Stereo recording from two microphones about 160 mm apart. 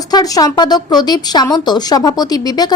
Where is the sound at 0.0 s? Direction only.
25° left (ahead or behind).